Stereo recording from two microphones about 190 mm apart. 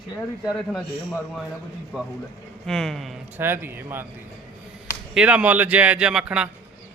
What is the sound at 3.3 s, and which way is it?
Speech, 10° right (ahead or behind).